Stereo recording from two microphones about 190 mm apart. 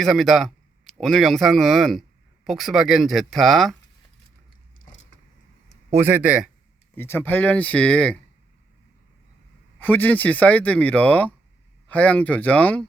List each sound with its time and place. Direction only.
0.0 s speech: centre (ahead or behind)
4.8 s vehicle: 40° left (ahead or behind)
5.9 s speech: 10° right (ahead or behind)
6.9 s speech: 10° left (ahead or behind)
9.8 s speech: 10° left (ahead or behind)